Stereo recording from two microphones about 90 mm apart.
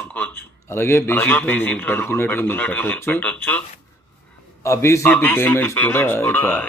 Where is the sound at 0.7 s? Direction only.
30° left (ahead or behind).